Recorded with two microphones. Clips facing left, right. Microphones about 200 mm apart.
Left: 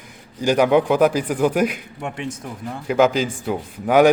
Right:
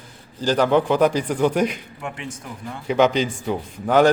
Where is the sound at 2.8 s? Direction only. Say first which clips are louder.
Left 1 dB; 5° left (ahead or behind).